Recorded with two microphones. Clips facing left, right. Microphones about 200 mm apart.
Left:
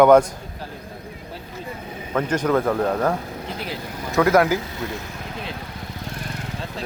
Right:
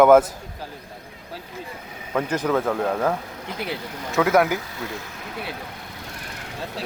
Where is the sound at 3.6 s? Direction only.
15° right (ahead or behind).